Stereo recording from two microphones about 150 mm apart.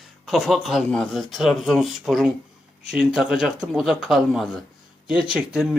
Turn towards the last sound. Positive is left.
turn(degrees=-5)  # may be behind; listen again after turning